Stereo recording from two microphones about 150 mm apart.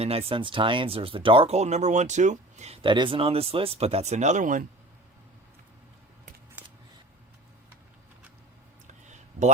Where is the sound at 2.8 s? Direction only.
35° right (ahead or behind); by 4.6 s 55° right (ahead or behind).